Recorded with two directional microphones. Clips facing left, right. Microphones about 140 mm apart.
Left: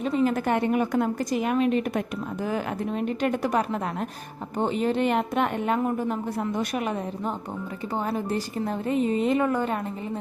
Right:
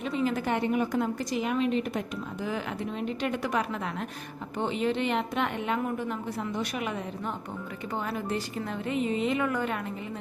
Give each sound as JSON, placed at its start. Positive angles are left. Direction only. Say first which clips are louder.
{"t": 0.0, "sound": "a woman's voice", "louder": "left 5 dB", "side_deg": 45}